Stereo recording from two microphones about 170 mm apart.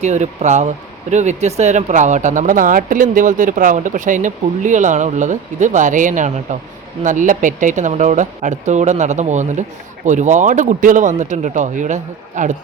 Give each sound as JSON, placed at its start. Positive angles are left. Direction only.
{"t": 0.0, "sound": "speech", "side_deg": -45}